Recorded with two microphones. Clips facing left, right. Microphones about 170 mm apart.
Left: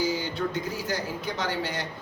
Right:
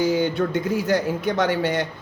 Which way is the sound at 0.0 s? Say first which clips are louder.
Right 7 dB; 60° right (ahead or behind).